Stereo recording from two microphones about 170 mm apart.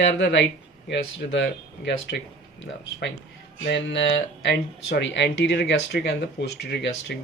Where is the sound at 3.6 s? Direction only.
90° left.